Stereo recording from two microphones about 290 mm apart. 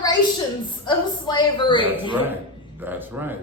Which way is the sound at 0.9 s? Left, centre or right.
Centre.